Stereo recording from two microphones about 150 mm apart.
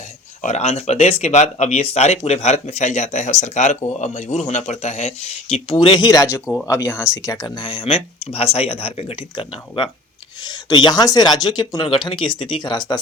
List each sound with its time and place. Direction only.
0.4 s speech: 45° left (ahead or behind); by 13.0 s 30° left (ahead or behind)